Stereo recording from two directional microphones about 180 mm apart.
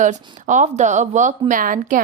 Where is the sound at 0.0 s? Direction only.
45° right (ahead or behind).